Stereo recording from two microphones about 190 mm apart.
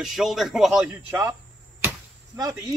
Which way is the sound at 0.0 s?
Centre (ahead or behind).